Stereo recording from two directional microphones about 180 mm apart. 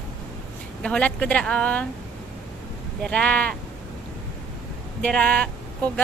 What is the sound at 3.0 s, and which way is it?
Speech, 5° left (ahead or behind).